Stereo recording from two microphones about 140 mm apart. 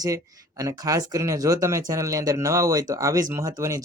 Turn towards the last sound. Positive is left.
turn(degrees=-25)  # may be behind; listen again after turning